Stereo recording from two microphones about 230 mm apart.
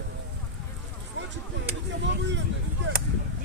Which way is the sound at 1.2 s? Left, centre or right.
Right.